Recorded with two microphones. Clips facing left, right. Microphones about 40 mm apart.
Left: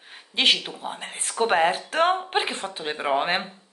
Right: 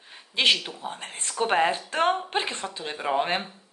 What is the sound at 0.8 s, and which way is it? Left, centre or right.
Speech, left.